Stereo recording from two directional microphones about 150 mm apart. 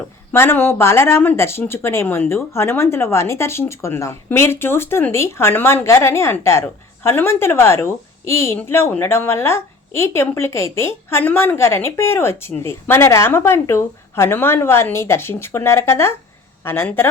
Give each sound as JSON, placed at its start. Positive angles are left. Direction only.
{"t": 0.3, "sound": "speech", "side_deg": 15}